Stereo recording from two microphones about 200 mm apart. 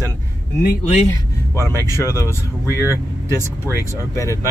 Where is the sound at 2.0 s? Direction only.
15° left (ahead or behind).